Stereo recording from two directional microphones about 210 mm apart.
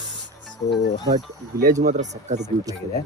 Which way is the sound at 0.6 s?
50° left (ahead or behind).